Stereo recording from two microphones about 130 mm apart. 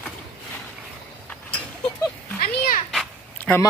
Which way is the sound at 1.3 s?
10° left (ahead or behind).